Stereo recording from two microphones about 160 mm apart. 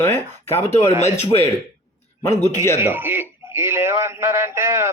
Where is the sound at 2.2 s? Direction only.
15° left (ahead or behind).